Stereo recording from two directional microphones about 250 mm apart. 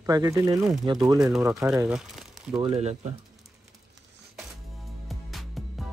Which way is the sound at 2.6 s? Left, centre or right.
Right.